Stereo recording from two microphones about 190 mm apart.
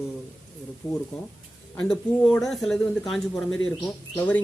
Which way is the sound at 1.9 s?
5° left (ahead or behind).